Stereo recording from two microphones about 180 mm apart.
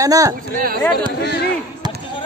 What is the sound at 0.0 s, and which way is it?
Speech, 20° right (ahead or behind).